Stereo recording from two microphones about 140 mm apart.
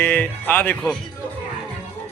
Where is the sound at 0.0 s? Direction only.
10° left (ahead or behind).